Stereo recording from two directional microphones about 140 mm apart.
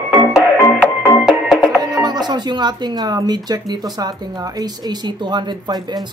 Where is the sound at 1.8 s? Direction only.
30° right (ahead or behind).